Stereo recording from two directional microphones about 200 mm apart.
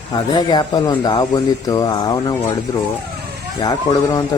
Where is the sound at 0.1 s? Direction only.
20° left (ahead or behind).